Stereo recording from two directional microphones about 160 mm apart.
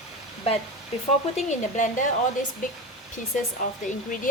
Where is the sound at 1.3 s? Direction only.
50° left (ahead or behind).